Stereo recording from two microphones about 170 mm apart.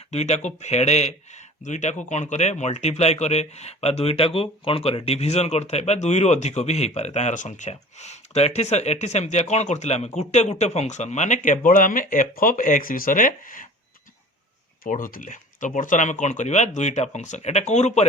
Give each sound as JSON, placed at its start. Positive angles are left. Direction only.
{"t": 0.1, "sound": "speech", "side_deg": 40}
{"t": 14.8, "sound": "speech", "side_deg": 55}